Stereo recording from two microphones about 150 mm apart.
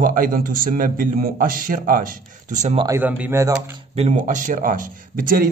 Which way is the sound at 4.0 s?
50° right (ahead or behind).